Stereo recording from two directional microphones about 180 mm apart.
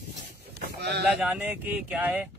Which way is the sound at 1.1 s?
5° right (ahead or behind).